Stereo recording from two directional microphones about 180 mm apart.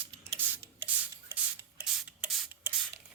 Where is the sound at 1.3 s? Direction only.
10° right (ahead or behind).